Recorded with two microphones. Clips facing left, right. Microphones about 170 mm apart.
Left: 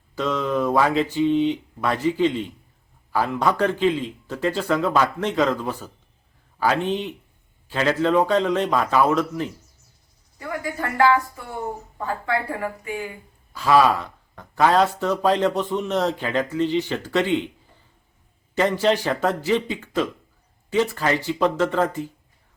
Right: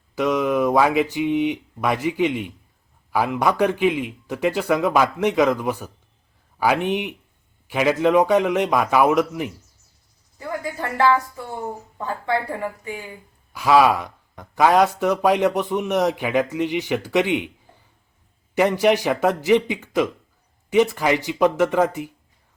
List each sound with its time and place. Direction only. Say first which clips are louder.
0.2 s speech: right 3 dB; 15° right (ahead or behind)
10.3 s a sound: even; 30° right (ahead or behind)
13.5 s speech: right 1 dB; 10° right (ahead or behind)
18.5 s speech: right 2 dB; 15° right (ahead or behind)